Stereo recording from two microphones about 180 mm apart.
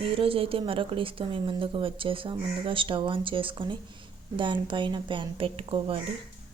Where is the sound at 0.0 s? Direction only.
30° right (ahead or behind).